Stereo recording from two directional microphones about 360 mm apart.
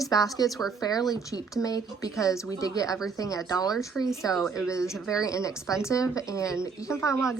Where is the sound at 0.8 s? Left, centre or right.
Centre.